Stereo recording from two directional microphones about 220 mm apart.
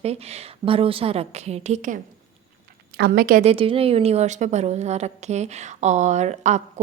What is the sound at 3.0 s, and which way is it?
Speech, 45° right (ahead or behind).